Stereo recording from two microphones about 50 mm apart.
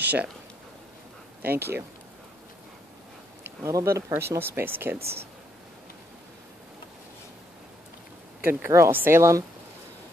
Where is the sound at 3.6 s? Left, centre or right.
Right.